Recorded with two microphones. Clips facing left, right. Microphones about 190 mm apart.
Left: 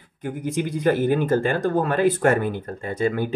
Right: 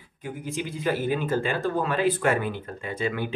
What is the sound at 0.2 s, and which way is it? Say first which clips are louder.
Speech: left 6 dB; 50° left (ahead or behind).